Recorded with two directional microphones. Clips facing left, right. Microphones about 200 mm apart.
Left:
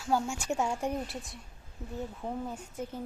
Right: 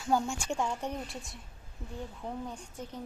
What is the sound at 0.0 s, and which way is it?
A woman's voice, 5° left (ahead or behind).